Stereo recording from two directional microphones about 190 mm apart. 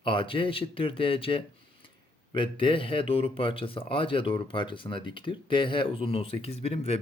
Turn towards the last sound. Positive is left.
turn(degrees=30)  # may be behind; listen again after turning